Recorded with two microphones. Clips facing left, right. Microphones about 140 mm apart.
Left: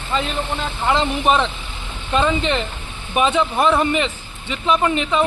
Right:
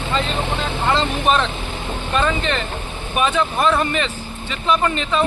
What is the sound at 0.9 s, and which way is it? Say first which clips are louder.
Speech: left 1 dB; 20° left (ahead or behind).